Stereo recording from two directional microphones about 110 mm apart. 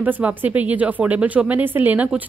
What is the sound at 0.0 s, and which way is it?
Speech, 15° right (ahead or behind).